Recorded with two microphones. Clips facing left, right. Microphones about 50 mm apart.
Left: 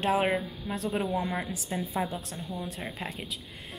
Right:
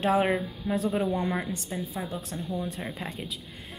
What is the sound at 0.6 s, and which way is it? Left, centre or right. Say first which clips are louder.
Speech: right 4 dB; centre.